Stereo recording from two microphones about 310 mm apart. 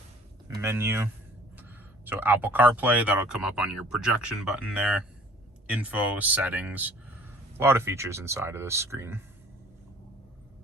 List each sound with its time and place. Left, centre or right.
0.6 s speech: centre